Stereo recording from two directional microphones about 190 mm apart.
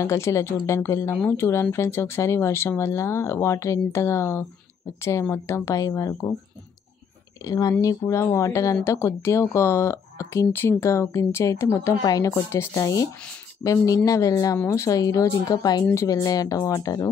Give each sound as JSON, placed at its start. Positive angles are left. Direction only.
{"t": 0.0, "sound": "speech", "side_deg": 15}
{"t": 7.4, "sound": "speech", "side_deg": 20}